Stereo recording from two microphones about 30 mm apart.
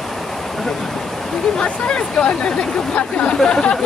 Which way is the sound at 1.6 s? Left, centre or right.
Left.